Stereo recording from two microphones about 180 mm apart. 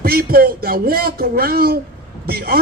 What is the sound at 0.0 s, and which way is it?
A man's voice, 55° right (ahead or behind).